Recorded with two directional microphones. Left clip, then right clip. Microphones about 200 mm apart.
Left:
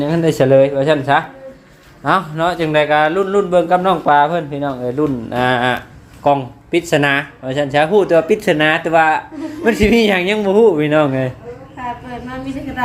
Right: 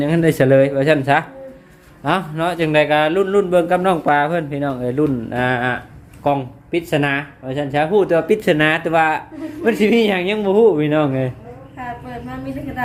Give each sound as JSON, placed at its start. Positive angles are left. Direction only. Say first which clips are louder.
{"t": 0.0, "sound": "a man's voice", "louder": "left 1 dB", "side_deg": -10}
{"t": 2.0, "sound": "a man's voice", "louder": "left 4 dB", "side_deg": -10}
{"t": 5.3, "sound": "speech", "louder": "left 4 dB", "side_deg": 0}